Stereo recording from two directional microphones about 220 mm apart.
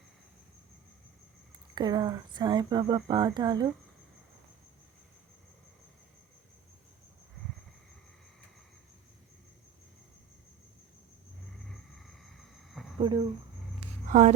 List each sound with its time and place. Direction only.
1.7 s speech: 20° right (ahead or behind)
11.7 s a sound: centre (ahead or behind)
13.0 s speech: 20° right (ahead or behind)
14.1 s speech: 35° right (ahead or behind)